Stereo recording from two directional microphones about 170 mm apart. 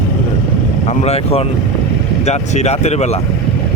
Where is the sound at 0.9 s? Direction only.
40° left (ahead or behind).